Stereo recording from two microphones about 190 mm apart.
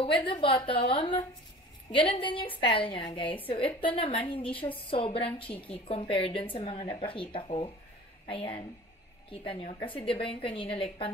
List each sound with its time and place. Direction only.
0.0 s a woman's voice: 25° left (ahead or behind)